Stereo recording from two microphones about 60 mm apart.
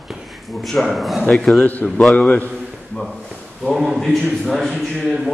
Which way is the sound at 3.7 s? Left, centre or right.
Centre.